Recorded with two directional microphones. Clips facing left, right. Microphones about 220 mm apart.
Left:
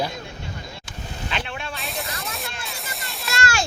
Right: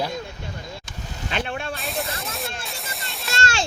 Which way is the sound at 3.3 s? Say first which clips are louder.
Left 1 dB; 25° right (ahead or behind).